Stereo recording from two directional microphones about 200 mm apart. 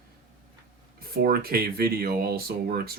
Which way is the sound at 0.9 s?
50° right (ahead or behind).